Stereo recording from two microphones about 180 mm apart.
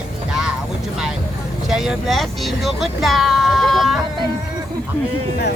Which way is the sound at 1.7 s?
Centre (ahead or behind).